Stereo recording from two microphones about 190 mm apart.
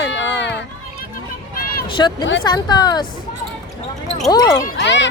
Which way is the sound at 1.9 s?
25° left (ahead or behind).